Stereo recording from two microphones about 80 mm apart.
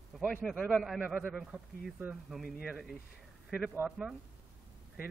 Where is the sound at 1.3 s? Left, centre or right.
Centre.